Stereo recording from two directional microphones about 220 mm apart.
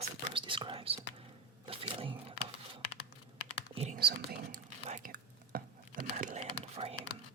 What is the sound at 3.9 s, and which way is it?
Whispering, 45° right (ahead or behind).